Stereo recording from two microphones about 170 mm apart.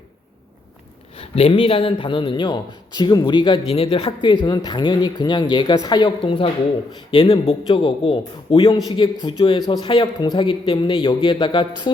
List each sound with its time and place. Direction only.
1.1 s a man's voice: 35° left (ahead or behind)